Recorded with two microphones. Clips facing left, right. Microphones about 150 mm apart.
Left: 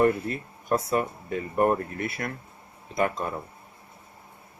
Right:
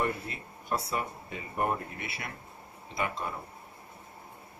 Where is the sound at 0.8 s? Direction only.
50° left (ahead or behind).